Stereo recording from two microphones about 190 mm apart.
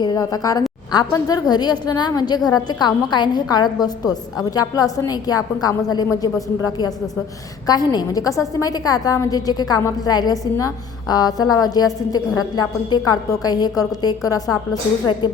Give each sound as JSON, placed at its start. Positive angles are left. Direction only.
{"t": 0.0, "sound": "a woman's voice", "side_deg": 20}
{"t": 7.7, "sound": "a woman's voice", "side_deg": 20}